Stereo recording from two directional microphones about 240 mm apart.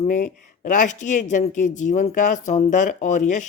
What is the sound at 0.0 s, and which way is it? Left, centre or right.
A woman's voice, left.